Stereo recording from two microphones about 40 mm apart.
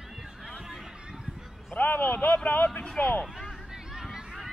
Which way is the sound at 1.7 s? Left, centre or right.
Left.